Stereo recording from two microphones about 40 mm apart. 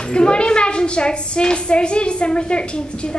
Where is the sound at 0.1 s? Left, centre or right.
Left.